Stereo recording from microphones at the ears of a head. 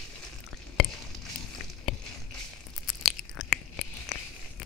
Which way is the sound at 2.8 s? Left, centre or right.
Left.